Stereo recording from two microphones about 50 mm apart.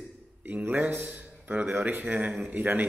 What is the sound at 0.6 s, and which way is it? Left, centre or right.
A man's voice, right.